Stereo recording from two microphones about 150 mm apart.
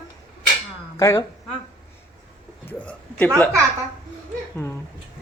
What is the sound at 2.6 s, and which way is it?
Speech, 10° left (ahead or behind).